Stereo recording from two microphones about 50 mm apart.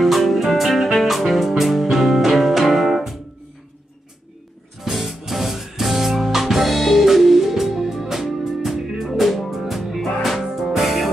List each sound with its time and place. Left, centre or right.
0.0 s music: centre
4.8 s music: centre